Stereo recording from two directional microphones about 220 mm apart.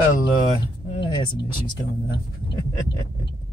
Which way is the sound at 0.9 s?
20° left (ahead or behind).